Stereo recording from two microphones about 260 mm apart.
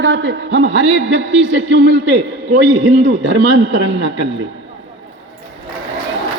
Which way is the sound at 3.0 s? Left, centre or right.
Right.